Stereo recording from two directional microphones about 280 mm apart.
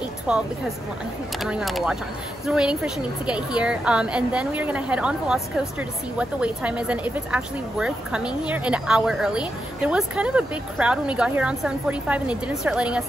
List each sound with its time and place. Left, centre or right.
0.3 s a woman's voice: centre